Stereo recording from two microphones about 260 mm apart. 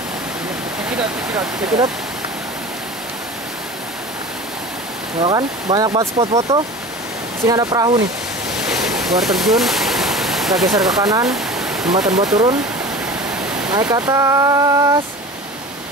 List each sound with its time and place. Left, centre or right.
5.2 s speech: centre
8.5 s a sound: centre
11.0 s speech: centre
11.2 s waterfall: centre
13.7 s speech: centre